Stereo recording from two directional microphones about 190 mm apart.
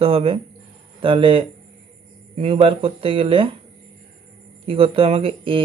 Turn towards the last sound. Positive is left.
turn(degrees=-30)  # may be behind; listen again after turning